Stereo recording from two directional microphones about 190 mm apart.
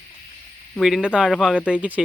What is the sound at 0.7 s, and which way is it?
Speech, centre (ahead or behind).